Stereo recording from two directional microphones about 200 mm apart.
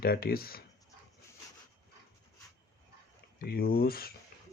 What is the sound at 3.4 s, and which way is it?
Speech, 50° left (ahead or behind).